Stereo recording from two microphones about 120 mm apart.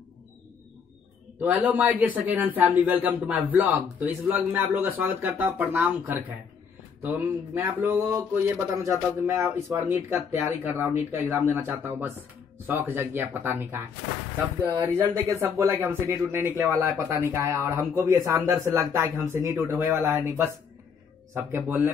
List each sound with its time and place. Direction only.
1.4 s speech: 15° right (ahead or behind)
7.0 s speech: 15° right (ahead or behind)